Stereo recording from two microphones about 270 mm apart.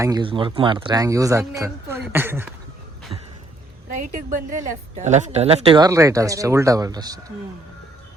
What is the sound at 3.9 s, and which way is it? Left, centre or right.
A man's voice, right.